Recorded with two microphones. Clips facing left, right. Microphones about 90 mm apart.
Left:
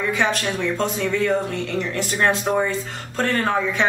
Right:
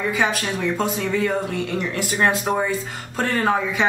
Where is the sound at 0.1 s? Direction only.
10° right (ahead or behind).